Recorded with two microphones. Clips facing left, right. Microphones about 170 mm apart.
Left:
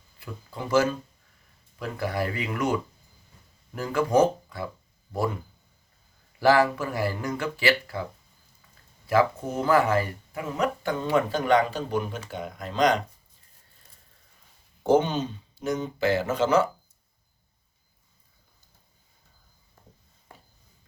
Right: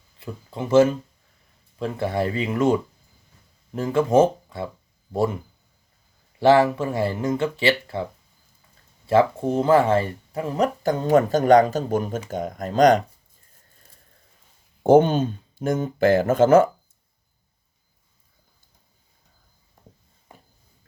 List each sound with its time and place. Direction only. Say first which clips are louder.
0.2 s speech: right 5 dB; 25° right (ahead or behind)
3.8 s speech: right 4 dB; 25° right (ahead or behind)
6.4 s speech: right 4 dB; 25° right (ahead or behind)
9.0 s speech: right 4 dB; 25° right (ahead or behind); by 13.0 s 45° right (ahead or behind)
14.8 s speech: right 6 dB; 50° right (ahead or behind)
19.8 s a sound: right 3 dB; 15° right (ahead or behind)